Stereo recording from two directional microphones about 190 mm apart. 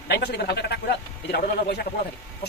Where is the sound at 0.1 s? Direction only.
60° left (ahead or behind).